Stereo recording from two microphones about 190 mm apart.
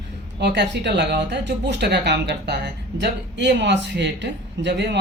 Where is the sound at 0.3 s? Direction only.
65° right (ahead or behind).